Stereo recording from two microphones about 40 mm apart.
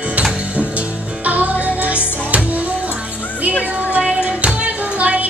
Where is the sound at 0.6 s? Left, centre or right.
Right.